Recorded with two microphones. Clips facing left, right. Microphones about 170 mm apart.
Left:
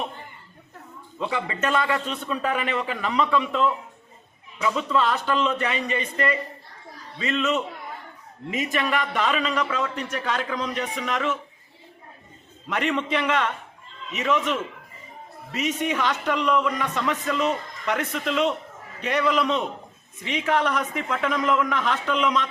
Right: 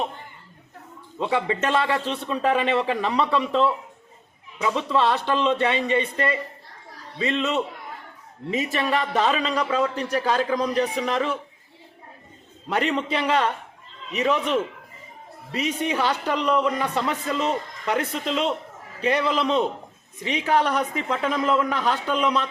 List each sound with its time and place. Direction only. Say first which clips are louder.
1.2 s a man's voice: right 3 dB; 30° right (ahead or behind)
12.6 s a man's voice: right 1 dB; 35° right (ahead or behind)